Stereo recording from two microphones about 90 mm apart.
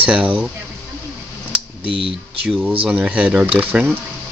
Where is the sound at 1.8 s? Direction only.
80° right.